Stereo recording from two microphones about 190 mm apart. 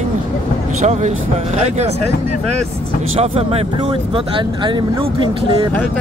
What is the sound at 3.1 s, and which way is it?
Speech, 30° right (ahead or behind).